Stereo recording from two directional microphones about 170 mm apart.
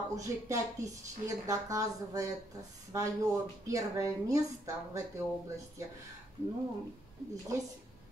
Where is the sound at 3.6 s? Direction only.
20° right (ahead or behind).